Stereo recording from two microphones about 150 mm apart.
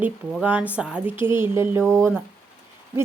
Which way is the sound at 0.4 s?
10° right (ahead or behind).